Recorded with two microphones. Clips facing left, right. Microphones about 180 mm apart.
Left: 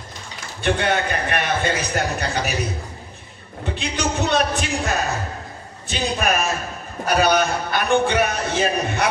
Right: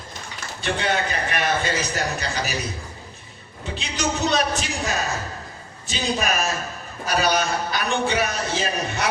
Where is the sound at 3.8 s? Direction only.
55° left (ahead or behind).